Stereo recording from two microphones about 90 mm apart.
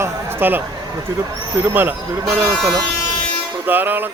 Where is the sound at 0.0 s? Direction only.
25° right (ahead or behind).